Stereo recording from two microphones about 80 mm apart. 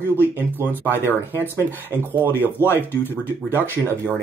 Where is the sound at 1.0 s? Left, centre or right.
Right.